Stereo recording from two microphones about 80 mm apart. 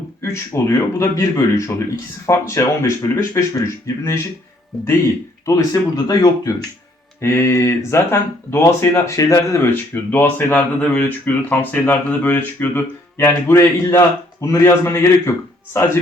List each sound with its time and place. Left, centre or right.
0.2 s speech: left
5.5 s speech: left
7.2 s speech: left
9.6 s speech: left